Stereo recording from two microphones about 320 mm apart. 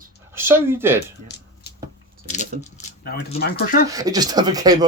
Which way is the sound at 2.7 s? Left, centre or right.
Left.